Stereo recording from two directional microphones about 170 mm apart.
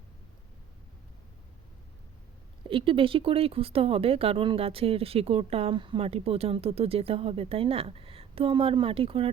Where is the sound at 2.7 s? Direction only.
30° right (ahead or behind).